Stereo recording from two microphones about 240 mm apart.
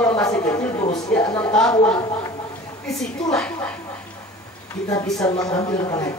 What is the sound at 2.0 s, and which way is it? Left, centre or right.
Speech, centre.